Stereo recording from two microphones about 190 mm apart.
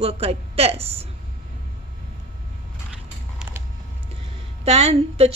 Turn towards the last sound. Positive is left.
turn(degrees=-35)  # may be behind; listen again after turning